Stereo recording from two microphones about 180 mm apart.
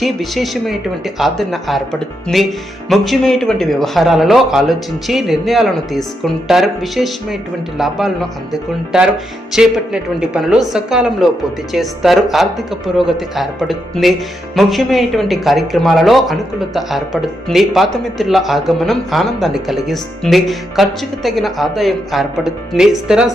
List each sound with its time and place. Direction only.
0.0 s speech: centre (ahead or behind)